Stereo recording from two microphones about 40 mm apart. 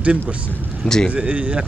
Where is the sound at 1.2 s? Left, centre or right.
Right.